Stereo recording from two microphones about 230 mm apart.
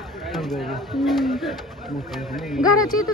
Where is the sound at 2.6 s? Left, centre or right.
Centre.